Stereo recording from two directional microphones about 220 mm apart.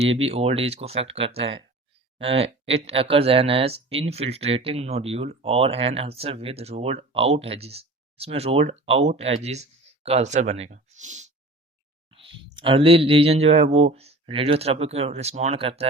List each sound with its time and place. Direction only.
0.0 s speech: 25° right (ahead or behind)